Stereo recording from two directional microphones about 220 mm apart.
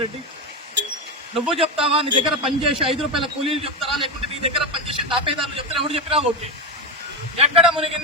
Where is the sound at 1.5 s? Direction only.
25° right (ahead or behind).